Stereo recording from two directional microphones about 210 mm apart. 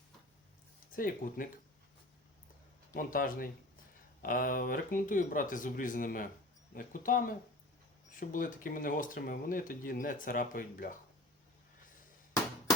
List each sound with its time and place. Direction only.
0.9 s speech: 40° left (ahead or behind)
2.9 s speech: 40° left (ahead or behind)